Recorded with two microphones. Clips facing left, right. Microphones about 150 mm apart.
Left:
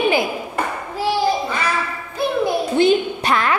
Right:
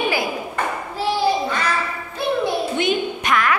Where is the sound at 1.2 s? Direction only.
10° left (ahead or behind).